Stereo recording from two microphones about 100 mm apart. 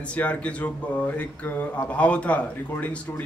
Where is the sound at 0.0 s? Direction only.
15° left (ahead or behind).